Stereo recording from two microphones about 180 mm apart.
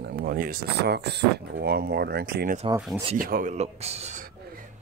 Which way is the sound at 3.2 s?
50° right (ahead or behind).